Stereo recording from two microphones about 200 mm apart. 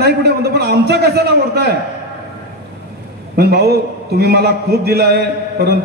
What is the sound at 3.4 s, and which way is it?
A man's voice, 50° right (ahead or behind).